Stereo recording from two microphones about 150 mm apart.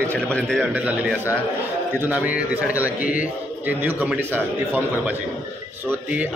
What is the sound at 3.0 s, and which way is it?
Speech, 60° left (ahead or behind).